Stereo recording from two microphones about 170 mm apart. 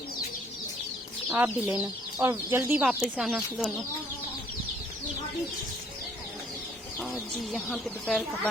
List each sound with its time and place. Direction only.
1.3 s speech: 10° right (ahead or behind)
2.7 s speech: 5° right (ahead or behind)
7.5 s speech: centre (ahead or behind)